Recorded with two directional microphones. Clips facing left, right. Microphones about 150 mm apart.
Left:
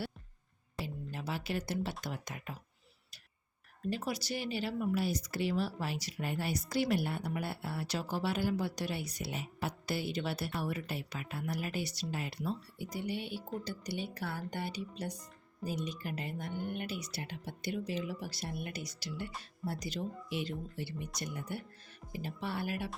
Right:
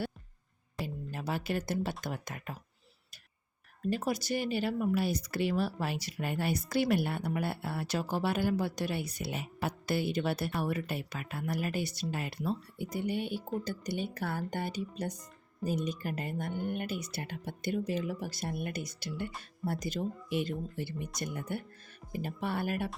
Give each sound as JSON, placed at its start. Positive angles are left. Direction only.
{"t": 1.1, "sound": "speech", "side_deg": -50}
{"t": 3.8, "sound": "speech", "side_deg": -50}